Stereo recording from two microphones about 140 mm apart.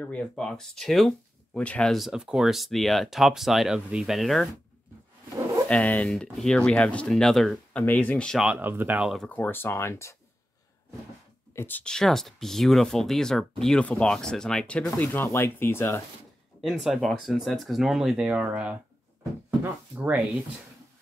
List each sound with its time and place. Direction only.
0.0 s speech: 5° left (ahead or behind)
5.7 s speech: 10° left (ahead or behind)
8.4 s speech: 10° right (ahead or behind)
9.3 s speech: 15° left (ahead or behind)
11.5 s speech: 15° left (ahead or behind)
16.6 s speech: centre (ahead or behind)